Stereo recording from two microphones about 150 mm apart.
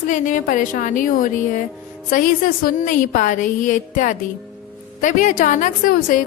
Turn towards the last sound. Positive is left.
turn(degrees=70)  # may be behind; listen again after turning